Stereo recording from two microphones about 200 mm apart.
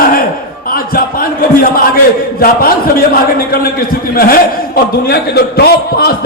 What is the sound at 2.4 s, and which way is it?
Speech, 45° left (ahead or behind).